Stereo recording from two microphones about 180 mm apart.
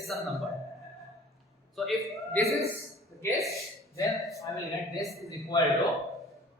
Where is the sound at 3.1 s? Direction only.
15° left (ahead or behind).